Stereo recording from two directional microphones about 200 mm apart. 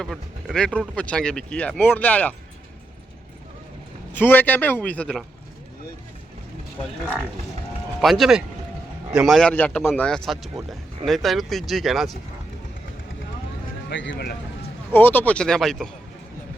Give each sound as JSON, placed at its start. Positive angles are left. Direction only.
{"t": 0.0, "sound": "speech", "side_deg": 0}
{"t": 4.1, "sound": "speech", "side_deg": 10}
{"t": 8.0, "sound": "speech", "side_deg": 0}
{"t": 13.9, "sound": "speech", "side_deg": 65}
{"t": 14.9, "sound": "speech", "side_deg": 10}